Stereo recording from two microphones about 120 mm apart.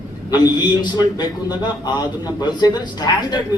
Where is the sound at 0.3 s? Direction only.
35° left (ahead or behind).